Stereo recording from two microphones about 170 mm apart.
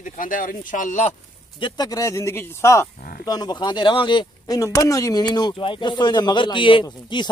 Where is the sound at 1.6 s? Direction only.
25° left (ahead or behind).